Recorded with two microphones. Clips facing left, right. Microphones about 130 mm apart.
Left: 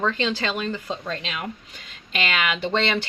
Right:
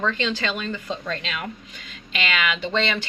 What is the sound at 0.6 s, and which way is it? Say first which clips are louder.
Speech: left 1 dB; 30° left (ahead or behind).